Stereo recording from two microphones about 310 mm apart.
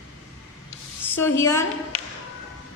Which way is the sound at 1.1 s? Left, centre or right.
Centre.